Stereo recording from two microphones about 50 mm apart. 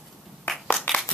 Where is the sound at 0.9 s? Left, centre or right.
Centre.